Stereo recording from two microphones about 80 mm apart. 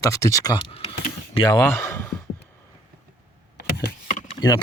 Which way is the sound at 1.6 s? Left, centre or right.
Left.